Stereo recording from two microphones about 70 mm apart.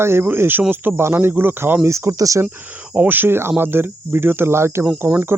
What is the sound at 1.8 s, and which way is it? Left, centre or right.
Speech, right.